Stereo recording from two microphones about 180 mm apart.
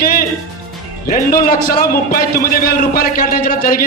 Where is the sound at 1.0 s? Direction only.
50° left (ahead or behind).